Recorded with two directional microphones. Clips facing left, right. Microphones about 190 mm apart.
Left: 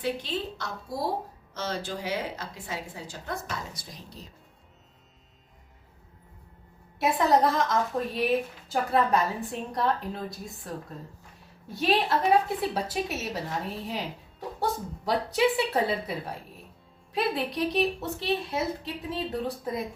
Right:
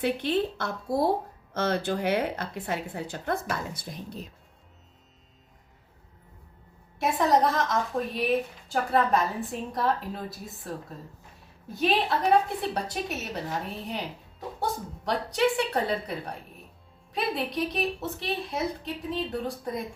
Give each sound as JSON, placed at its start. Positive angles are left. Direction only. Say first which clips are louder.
{"t": 0.0, "sound": "a woman's voice", "louder": "right 5 dB", "side_deg": -60}
{"t": 7.0, "sound": "a woman's voice", "louder": "even", "side_deg": 0}